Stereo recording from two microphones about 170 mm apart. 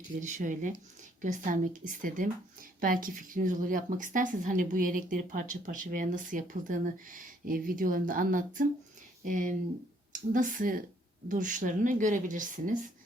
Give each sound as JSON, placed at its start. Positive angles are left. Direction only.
{"t": 0.2, "sound": "a woman's voice", "side_deg": -50}